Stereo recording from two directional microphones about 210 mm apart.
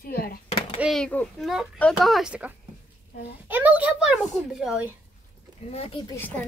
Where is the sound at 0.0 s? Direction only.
45° left (ahead or behind).